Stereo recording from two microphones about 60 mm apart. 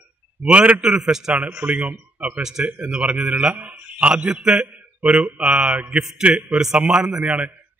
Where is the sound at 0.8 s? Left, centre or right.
Centre.